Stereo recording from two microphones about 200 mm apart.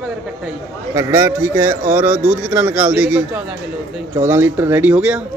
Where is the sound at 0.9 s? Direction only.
15° right (ahead or behind).